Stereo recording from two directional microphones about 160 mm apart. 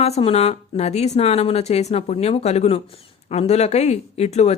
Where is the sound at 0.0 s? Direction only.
40° left (ahead or behind).